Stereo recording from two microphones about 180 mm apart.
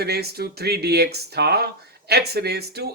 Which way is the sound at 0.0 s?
60° right (ahead or behind).